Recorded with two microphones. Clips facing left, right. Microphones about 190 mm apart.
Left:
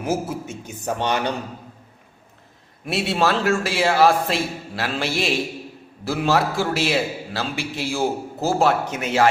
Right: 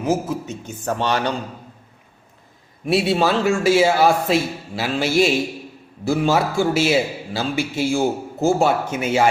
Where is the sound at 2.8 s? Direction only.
Centre (ahead or behind).